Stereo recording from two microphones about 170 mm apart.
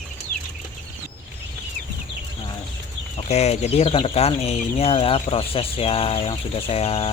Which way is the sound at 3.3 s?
40° left (ahead or behind).